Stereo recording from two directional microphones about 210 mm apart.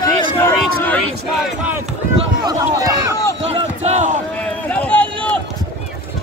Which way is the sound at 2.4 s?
15° right (ahead or behind).